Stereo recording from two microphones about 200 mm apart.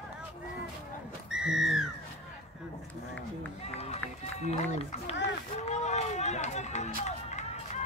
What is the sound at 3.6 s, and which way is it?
Run, 35° left (ahead or behind).